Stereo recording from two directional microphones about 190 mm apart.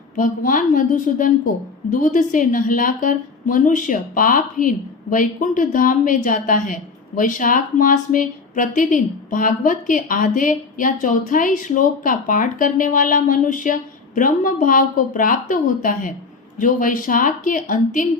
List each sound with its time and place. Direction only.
0.2 s a woman's voice: 45° left (ahead or behind)